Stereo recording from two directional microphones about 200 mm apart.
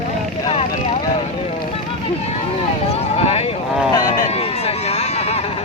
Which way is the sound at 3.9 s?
25° left (ahead or behind).